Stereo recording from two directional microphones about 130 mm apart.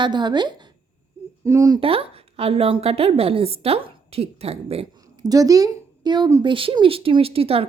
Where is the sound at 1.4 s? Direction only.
25° right (ahead or behind).